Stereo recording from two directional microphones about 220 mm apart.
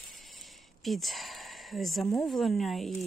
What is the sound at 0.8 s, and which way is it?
Speech, centre (ahead or behind).